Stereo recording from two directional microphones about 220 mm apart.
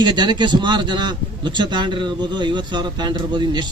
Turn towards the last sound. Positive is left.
turn(degrees=-20)  # may be behind; listen again after turning